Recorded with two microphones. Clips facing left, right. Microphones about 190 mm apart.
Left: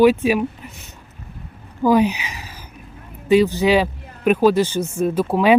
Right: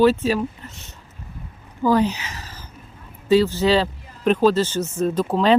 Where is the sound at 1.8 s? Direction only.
15° left (ahead or behind).